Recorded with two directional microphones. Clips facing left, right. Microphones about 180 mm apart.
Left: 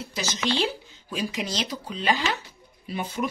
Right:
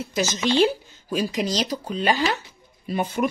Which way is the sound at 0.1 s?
45° right (ahead or behind).